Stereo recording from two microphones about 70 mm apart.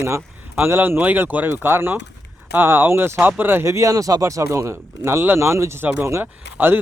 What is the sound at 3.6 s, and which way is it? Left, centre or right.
Speech, right.